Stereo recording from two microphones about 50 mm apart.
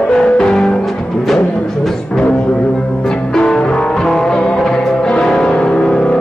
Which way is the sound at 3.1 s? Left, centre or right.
Centre.